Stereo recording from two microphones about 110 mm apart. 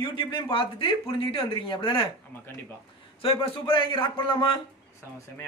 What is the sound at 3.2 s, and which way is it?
A man's voice, 55° left (ahead or behind).